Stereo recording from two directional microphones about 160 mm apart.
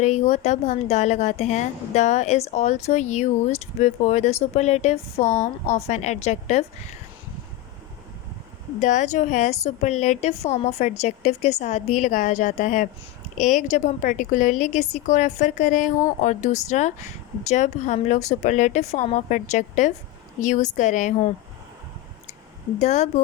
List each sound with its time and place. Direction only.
0.0 s a woman's voice: 45° left (ahead or behind)
8.8 s a woman's voice: 50° left (ahead or behind)
22.8 s a woman's voice: 45° left (ahead or behind)